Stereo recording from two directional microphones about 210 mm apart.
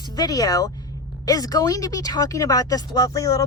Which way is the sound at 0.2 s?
20° left (ahead or behind).